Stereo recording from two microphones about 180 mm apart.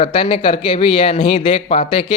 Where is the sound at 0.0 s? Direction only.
30° left (ahead or behind).